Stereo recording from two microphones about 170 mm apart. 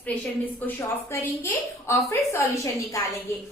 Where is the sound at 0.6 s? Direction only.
15° left (ahead or behind).